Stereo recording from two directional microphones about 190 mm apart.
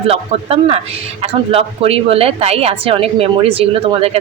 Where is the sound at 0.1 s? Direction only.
30° right (ahead or behind).